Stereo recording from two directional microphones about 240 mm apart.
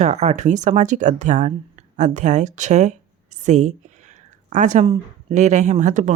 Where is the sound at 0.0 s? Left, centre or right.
Right.